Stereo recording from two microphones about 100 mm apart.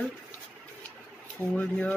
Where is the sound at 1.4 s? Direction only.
15° left (ahead or behind).